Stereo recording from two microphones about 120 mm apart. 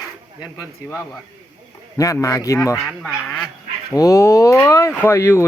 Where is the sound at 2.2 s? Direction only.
25° left (ahead or behind).